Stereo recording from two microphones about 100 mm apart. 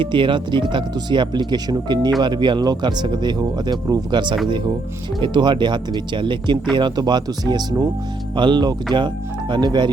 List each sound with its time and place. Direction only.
0.0 s speech: 55° right (ahead or behind)